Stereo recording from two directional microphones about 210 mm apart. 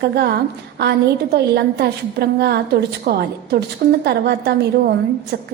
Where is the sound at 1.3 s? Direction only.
50° right (ahead or behind).